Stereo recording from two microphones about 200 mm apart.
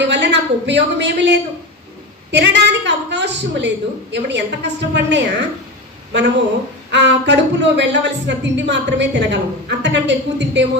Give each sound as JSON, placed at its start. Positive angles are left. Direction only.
{"t": 0.0, "sound": "a woman's voice", "side_deg": -60}
{"t": 6.9, "sound": "speech", "side_deg": -60}